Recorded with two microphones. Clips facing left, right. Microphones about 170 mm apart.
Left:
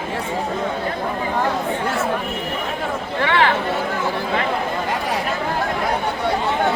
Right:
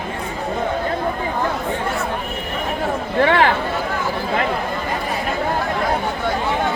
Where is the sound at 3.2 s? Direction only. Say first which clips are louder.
Right 2 dB; 40° right (ahead or behind).